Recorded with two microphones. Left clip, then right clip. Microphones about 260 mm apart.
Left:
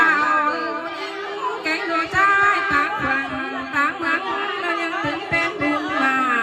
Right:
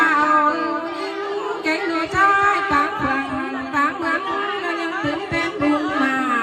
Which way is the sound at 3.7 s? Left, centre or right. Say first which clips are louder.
Even; centre.